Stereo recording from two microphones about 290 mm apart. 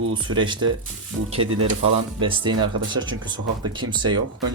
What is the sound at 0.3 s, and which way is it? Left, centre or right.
Speech, centre.